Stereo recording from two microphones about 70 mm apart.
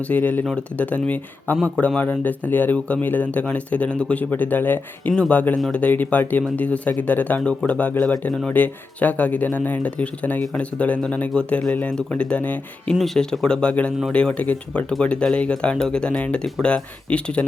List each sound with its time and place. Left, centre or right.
0.1 s speech: left
12.9 s speech: centre